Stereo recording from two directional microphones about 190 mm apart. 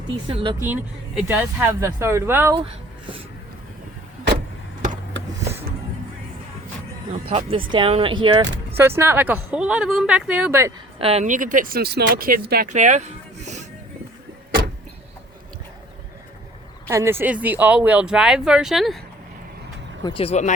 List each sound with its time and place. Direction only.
0.3 s speech: 30° right (ahead or behind)
0.6 s speech: 10° right (ahead or behind)
7.1 s speech: 35° right (ahead or behind)
8.8 s speech: 15° right (ahead or behind)
11.0 s speech: 35° right (ahead or behind); by 12.7 s 50° right (ahead or behind)
12.7 s a sound: 40° right (ahead or behind)
16.9 s speech: 15° right (ahead or behind)
20.1 s speech: 30° left (ahead or behind)